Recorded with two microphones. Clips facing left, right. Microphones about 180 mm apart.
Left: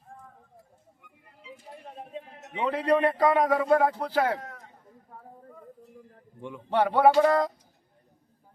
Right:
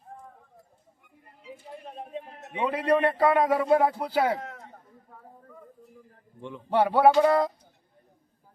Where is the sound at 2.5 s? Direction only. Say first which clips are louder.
Even; 10° right (ahead or behind).